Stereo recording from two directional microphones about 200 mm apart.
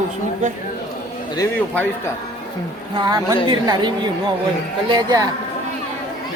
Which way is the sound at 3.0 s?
20° right (ahead or behind).